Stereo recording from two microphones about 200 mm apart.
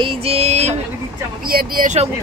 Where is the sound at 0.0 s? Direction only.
30° right (ahead or behind).